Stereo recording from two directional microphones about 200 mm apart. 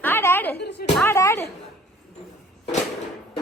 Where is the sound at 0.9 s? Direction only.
10° left (ahead or behind).